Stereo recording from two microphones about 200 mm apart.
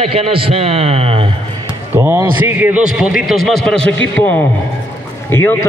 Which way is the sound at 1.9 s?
10° right (ahead or behind).